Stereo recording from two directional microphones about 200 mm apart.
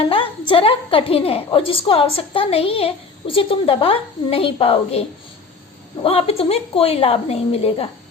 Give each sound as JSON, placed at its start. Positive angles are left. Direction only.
{"t": 0.0, "sound": "a woman's voice", "side_deg": 25}